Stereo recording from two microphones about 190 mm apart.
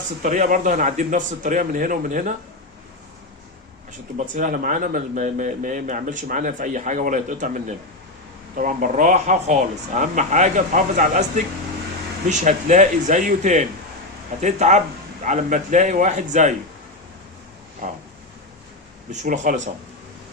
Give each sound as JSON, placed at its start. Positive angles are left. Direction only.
{"t": 0.2, "sound": "speech", "side_deg": -40}
{"t": 4.4, "sound": "speech", "side_deg": -45}
{"t": 17.8, "sound": "speech", "side_deg": -40}
{"t": 19.1, "sound": "speech", "side_deg": -40}